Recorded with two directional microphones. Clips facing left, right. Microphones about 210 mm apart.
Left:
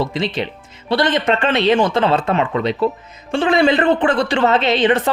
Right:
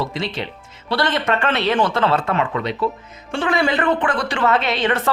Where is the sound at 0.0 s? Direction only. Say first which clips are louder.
Left 4 dB; 20° left (ahead or behind).